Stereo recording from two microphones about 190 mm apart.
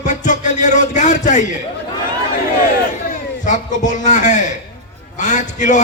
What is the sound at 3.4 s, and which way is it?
A man's voice, 40° left (ahead or behind).